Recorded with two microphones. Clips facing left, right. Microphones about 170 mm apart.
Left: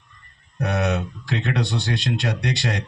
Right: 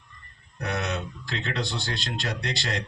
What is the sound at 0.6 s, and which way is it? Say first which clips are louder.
Speech: left 7 dB; 70° left (ahead or behind).